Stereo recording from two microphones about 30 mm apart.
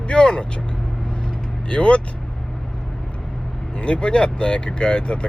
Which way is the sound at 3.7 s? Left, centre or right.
Left.